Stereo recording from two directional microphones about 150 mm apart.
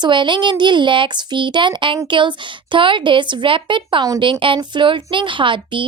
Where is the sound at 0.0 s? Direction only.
30° right (ahead or behind).